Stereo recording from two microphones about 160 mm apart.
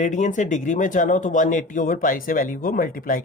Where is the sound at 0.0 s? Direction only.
50° left (ahead or behind).